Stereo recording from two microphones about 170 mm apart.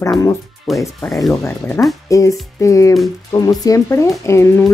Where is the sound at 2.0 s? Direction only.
20° left (ahead or behind).